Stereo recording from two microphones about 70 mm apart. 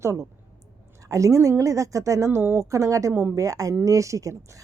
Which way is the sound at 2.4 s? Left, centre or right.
Right.